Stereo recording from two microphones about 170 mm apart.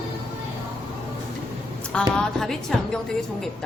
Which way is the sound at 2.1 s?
5° left (ahead or behind).